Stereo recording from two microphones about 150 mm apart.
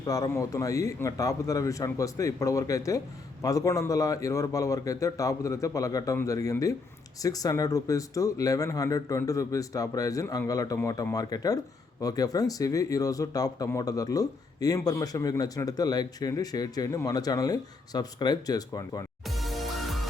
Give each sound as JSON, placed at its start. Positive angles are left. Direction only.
{"t": 0.0, "sound": "speech", "side_deg": 25}
{"t": 19.2, "sound": "music", "side_deg": 0}